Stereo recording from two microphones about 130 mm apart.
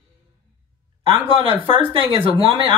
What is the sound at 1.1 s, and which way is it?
Speech, 40° right (ahead or behind).